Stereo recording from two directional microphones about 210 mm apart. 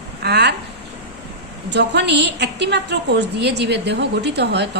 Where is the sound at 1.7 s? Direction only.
55° right (ahead or behind).